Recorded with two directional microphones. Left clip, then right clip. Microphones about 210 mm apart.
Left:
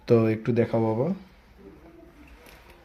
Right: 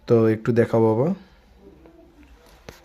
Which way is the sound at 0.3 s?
30° right (ahead or behind).